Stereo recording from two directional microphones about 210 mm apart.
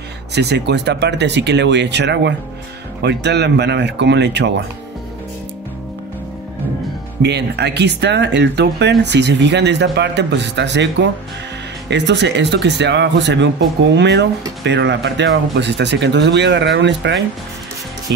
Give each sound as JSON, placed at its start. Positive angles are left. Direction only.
{"t": 0.3, "sound": "speech", "side_deg": -55}
{"t": 7.2, "sound": "speech", "side_deg": -55}